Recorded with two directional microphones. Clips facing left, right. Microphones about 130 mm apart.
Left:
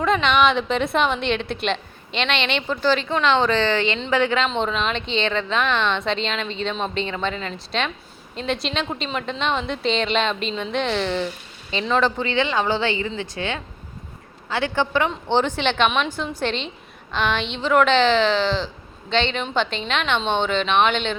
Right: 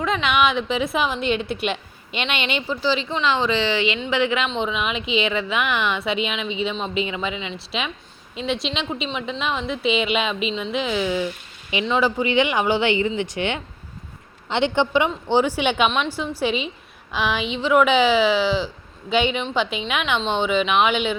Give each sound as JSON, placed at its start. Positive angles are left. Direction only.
{"t": 0.0, "sound": "a woman's voice", "side_deg": 0}
{"t": 4.4, "sound": "a woman's voice", "side_deg": 0}